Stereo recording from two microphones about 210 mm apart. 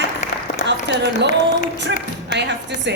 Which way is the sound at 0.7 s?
55° right (ahead or behind).